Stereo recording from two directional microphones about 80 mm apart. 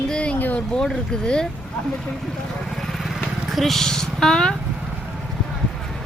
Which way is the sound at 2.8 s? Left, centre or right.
Centre.